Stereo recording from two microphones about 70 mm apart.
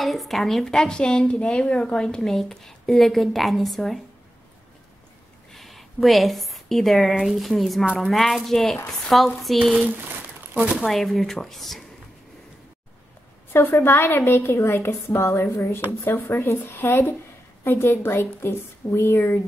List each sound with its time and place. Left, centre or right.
0.0 s a woman's voice: centre
5.5 s a woman's voice: centre
10.5 s speech: centre
10.8 s a woman's voice: centre
13.5 s a woman's voice: left